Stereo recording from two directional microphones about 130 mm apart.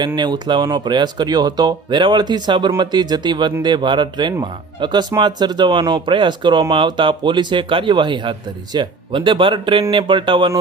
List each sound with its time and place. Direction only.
0.2 s speech: 35° right (ahead or behind)